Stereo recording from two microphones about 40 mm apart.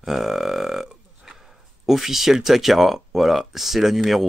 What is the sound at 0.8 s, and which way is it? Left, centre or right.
Burping, centre.